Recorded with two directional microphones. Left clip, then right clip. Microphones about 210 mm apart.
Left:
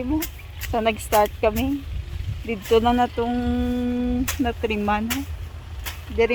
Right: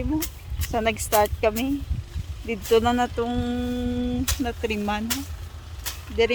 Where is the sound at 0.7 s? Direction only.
10° left (ahead or behind).